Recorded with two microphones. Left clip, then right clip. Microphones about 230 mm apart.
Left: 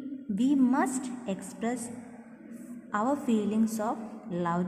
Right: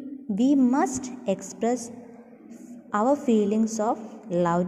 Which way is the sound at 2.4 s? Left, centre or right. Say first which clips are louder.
Even; centre.